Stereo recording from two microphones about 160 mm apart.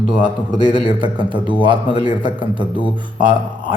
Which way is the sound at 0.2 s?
30° right (ahead or behind).